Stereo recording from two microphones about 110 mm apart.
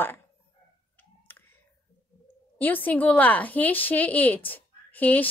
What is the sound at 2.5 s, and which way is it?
A woman's voice, 15° left (ahead or behind).